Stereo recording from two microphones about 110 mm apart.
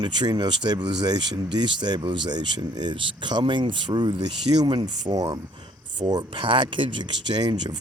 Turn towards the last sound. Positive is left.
turn(degrees=-40)  # may be behind; listen again after turning